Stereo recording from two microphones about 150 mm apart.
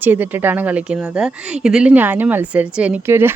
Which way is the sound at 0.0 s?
10° right (ahead or behind).